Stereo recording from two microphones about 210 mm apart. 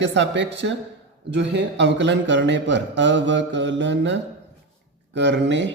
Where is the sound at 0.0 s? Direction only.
55° right (ahead or behind).